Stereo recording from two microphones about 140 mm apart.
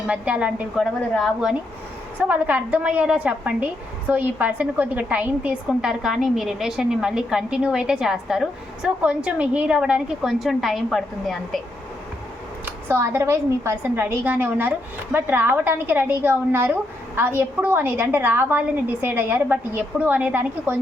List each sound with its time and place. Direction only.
0.1 s a woman's voice: 10° right (ahead or behind)
2.1 s a woman's voice: 10° right (ahead or behind)
12.6 s a woman's voice: 20° right (ahead or behind)